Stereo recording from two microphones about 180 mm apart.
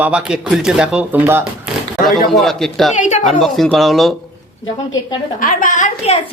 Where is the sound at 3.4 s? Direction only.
Centre (ahead or behind).